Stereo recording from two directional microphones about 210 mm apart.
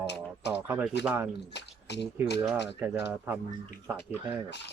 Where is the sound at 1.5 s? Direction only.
55° left (ahead or behind).